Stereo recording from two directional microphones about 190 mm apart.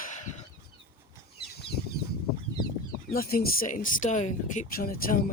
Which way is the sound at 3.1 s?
50° left (ahead or behind).